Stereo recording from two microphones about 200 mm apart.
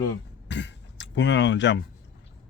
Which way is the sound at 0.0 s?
60° left (ahead or behind).